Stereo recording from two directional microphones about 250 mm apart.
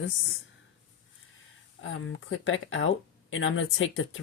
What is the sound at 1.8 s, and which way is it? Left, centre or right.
Speech, left.